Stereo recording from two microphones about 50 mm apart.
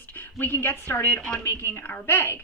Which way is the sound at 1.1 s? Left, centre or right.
Left.